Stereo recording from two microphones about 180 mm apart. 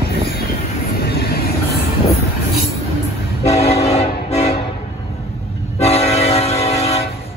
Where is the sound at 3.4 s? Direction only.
35° left (ahead or behind).